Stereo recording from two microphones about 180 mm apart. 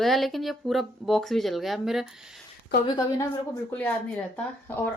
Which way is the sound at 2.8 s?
20° left (ahead or behind).